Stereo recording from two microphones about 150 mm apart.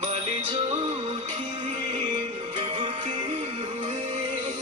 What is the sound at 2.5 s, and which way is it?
Music, 30° right (ahead or behind).